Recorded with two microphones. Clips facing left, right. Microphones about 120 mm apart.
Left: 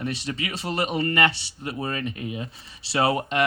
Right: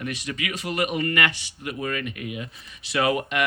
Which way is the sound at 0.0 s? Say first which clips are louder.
Left 1 dB; 30° left (ahead or behind).